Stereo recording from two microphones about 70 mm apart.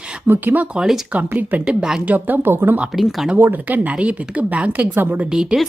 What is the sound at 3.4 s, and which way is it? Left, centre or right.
A woman's voice, right.